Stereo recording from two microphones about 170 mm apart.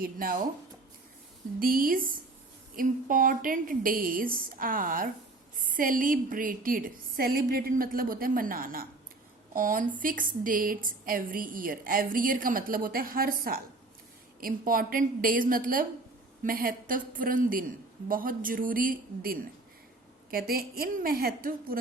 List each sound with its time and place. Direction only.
0.0 s a woman's voice: 60° right (ahead or behind)
1.5 s a woman's voice: 55° right (ahead or behind)